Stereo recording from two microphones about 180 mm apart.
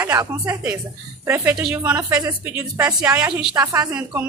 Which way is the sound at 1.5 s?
5° right (ahead or behind).